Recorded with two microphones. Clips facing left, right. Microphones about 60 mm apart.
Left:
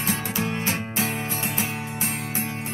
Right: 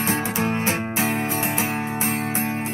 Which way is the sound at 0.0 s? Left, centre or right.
Right.